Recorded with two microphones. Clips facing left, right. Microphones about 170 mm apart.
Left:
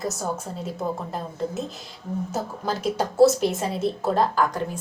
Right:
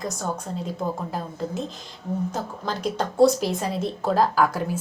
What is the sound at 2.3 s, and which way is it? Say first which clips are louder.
A woman's voice: left 2 dB; 5° left (ahead or behind).